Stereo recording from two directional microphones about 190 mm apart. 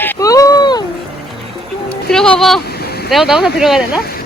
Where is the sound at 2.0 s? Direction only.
5° left (ahead or behind).